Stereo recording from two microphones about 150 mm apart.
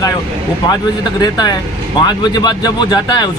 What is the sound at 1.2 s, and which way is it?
Speech, 30° left (ahead or behind).